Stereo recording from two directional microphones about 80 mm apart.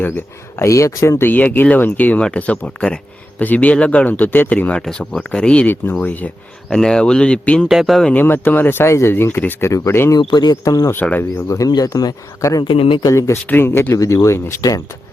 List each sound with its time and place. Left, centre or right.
0.0 s speech: left
0.7 s speech: left
1.2 s speech: left
4.9 s speech: centre
6.7 s speech: centre
7.7 s speech: centre
8.1 s speech: left
10.2 s speech: left
10.6 s speech: left
11.2 s speech: left
11.7 s speech: left
12.6 s speech: left
13.1 s speech: left
13.9 s speech: left